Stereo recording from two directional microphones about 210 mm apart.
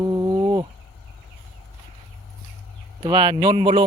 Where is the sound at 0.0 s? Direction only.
20° right (ahead or behind).